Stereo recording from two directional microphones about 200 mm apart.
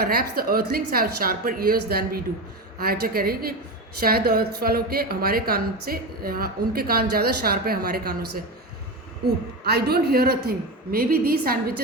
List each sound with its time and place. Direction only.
0.0 s a woman's voice: 50° right (ahead or behind)
9.6 s a woman's voice: 55° right (ahead or behind)